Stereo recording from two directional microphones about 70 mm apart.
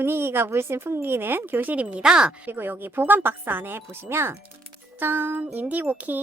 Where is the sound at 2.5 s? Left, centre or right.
Right.